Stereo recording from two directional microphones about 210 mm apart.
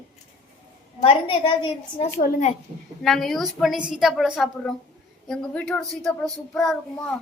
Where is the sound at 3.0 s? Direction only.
Centre (ahead or behind).